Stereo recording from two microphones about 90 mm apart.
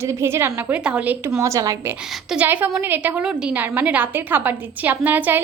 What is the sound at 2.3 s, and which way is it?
A woman's voice, 15° right (ahead or behind).